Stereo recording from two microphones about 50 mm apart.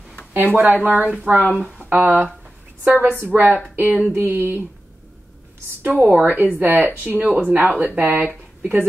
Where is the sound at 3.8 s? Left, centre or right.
Right.